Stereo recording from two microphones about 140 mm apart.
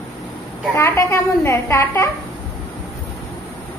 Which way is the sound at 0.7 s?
20° left (ahead or behind).